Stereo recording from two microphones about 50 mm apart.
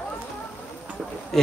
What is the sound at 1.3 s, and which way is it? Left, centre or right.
Speech, centre.